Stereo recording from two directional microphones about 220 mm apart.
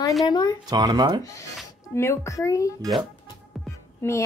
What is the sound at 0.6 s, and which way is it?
Speech, 20° right (ahead or behind).